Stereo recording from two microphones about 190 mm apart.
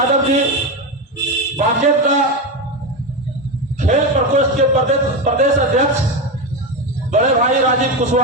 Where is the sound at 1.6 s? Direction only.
40° right (ahead or behind).